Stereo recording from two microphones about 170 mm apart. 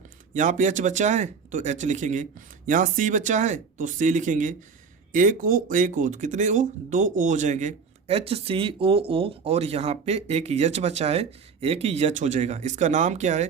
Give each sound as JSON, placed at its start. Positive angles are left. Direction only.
{"t": 0.3, "sound": "speech", "side_deg": -45}